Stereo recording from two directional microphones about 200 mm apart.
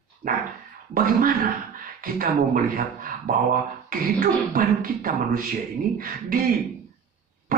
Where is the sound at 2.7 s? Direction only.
45° right (ahead or behind).